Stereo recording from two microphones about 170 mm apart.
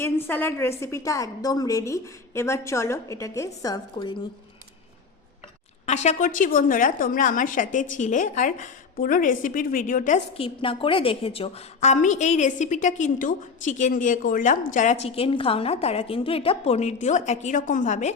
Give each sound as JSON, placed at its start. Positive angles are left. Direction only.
{"t": 0.0, "sound": "a woman's voice", "side_deg": 15}
{"t": 5.8, "sound": "a woman's voice", "side_deg": 40}
{"t": 10.3, "sound": "a woman's voice", "side_deg": 30}
{"t": 15.0, "sound": "a woman's voice", "side_deg": 35}